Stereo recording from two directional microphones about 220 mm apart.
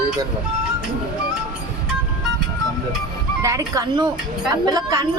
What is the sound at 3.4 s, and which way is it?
Speech, 15° right (ahead or behind).